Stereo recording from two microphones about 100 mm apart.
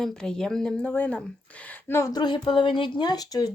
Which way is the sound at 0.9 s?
15° left (ahead or behind).